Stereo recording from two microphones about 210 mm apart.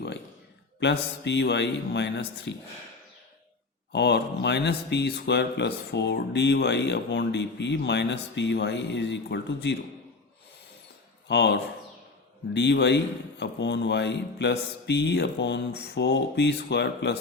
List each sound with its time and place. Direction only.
0.8 s speech: 55° left (ahead or behind)
3.9 s speech: 55° left (ahead or behind)
11.3 s speech: 55° left (ahead or behind)